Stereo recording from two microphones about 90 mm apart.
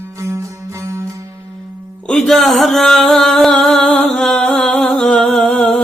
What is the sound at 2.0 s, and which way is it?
Music, 5° left (ahead or behind).